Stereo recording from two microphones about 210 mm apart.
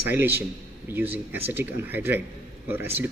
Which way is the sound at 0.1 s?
10° right (ahead or behind).